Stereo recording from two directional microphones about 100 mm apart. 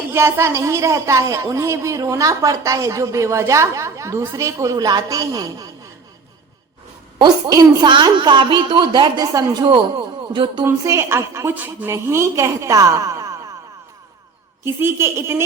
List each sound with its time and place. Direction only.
0.1 s speech: 30° right (ahead or behind)
7.2 s a woman's voice: 45° right (ahead or behind)
10.3 s a woman's voice: 50° right (ahead or behind)
10.8 s a woman's voice: 30° right (ahead or behind)
14.6 s a woman's voice: 25° right (ahead or behind)